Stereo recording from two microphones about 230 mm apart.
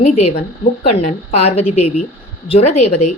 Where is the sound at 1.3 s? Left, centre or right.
Left.